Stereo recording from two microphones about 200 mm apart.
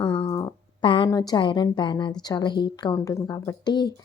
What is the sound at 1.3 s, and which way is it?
A woman's voice, 25° left (ahead or behind).